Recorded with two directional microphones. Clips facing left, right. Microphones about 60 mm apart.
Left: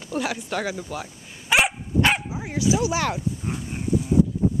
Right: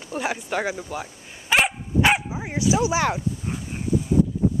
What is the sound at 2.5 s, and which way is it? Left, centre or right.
Speech, centre.